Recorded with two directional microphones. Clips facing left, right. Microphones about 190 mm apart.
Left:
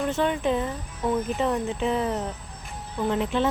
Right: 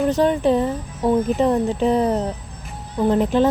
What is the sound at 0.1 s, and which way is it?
Speech, 40° right (ahead or behind).